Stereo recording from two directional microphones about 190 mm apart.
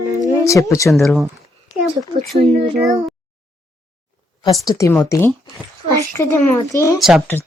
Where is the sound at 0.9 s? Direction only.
Centre (ahead or behind).